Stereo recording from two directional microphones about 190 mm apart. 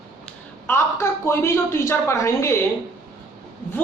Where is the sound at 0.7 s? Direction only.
15° left (ahead or behind).